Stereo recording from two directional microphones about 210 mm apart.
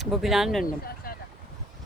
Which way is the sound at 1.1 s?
45° left (ahead or behind).